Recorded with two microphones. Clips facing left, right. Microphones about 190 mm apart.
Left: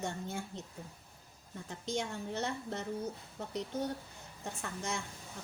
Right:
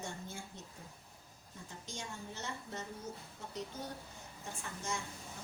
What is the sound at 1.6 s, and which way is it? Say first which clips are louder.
A woman's voice: left 10 dB; 65° left (ahead or behind).